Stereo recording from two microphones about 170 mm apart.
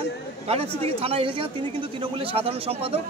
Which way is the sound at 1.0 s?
35° right (ahead or behind).